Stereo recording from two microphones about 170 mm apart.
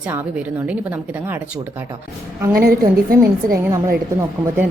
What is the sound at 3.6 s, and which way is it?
Speech, 20° right (ahead or behind).